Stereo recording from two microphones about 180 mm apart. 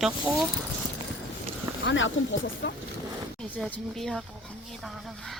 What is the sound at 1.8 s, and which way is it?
Speech, 90° left.